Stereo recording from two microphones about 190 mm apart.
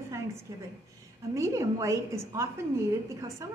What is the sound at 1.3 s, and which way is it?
A woman's voice, 15° right (ahead or behind).